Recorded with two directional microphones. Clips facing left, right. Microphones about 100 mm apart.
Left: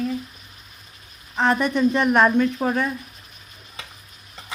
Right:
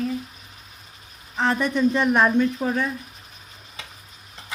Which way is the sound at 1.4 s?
55° left (ahead or behind).